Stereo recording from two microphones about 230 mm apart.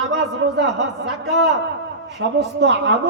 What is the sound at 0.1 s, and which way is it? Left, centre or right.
A man's voice, right.